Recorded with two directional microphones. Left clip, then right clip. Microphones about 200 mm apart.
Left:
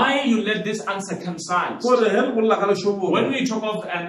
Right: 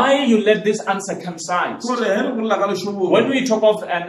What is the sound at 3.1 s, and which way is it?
Speech, 35° right (ahead or behind).